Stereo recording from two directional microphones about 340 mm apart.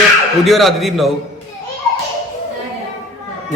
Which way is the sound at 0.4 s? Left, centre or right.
Centre.